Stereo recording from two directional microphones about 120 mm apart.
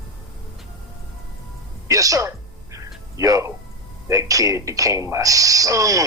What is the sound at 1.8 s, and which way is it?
Speech, 30° right (ahead or behind).